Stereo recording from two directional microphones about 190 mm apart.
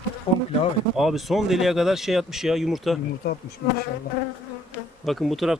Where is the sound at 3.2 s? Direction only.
55° left (ahead or behind).